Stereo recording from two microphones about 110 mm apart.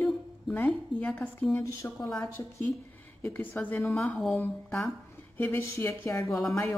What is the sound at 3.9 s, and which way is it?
Speech, 5° left (ahead or behind).